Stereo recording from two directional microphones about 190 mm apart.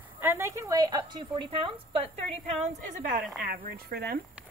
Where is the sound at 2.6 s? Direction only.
45° right (ahead or behind).